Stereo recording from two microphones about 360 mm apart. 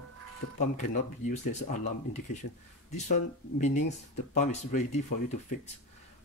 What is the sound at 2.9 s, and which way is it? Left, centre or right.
Speech, centre.